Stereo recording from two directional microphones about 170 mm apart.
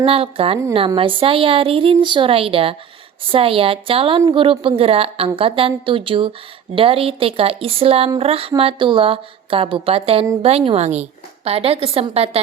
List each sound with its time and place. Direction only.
0.0 s a woman's voice: 35° right (ahead or behind)